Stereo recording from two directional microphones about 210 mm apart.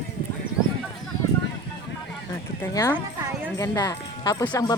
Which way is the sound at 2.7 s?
15° left (ahead or behind).